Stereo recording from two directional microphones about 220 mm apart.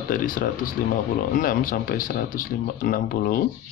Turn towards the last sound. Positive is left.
turn(degrees=40)  # may be behind; listen again after turning